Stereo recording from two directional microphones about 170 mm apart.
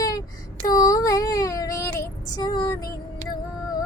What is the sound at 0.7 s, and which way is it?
Child singing, 20° left (ahead or behind).